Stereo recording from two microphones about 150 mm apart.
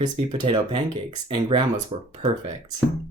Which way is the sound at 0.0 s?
35° right (ahead or behind).